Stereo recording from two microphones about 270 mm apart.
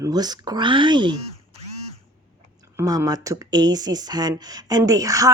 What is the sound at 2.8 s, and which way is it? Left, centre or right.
Speech, centre.